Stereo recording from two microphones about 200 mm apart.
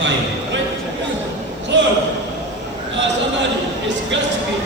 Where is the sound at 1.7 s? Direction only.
65° right (ahead or behind).